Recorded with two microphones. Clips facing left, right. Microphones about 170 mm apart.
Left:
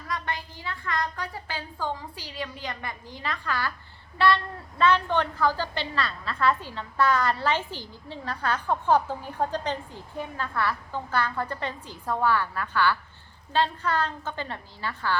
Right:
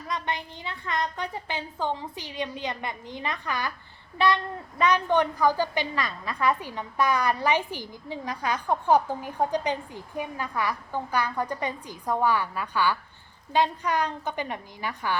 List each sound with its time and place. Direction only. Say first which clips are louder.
0.1 s a woman's voice: right 1 dB; 20° right (ahead or behind)